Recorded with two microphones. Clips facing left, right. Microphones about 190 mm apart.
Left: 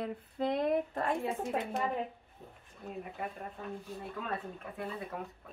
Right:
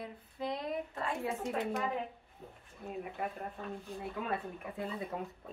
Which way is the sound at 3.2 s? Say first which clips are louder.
Right 2 dB; 5° right (ahead or behind).